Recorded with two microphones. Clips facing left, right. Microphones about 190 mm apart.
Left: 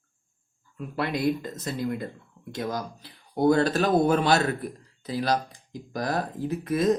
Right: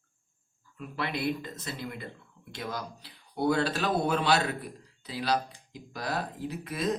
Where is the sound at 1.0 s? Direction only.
45° left (ahead or behind).